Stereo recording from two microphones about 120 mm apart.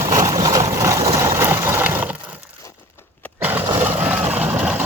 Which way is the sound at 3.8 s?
10° right (ahead or behind).